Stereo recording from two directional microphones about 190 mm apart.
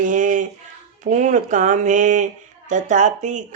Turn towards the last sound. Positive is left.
turn(degrees=-40)  # may be behind; listen again after turning